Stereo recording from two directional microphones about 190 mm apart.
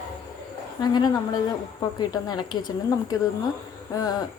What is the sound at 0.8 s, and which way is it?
A woman's voice, 20° left (ahead or behind).